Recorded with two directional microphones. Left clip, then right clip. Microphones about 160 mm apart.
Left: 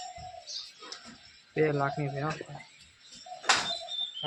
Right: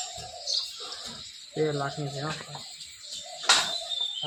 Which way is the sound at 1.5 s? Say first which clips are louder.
Left 1 dB; 30° left (ahead or behind).